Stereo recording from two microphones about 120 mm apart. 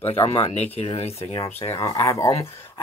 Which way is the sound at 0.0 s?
55° left (ahead or behind).